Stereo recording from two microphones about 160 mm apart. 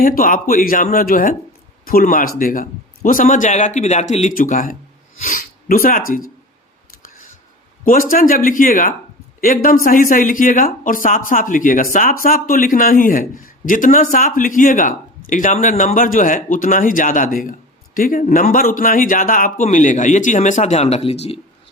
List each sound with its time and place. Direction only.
0.0 s a man's voice: 60° left (ahead or behind)
8.1 s a man's voice: 60° left (ahead or behind)
16.0 s a man's voice: 60° left (ahead or behind); by 21.4 s 40° left (ahead or behind)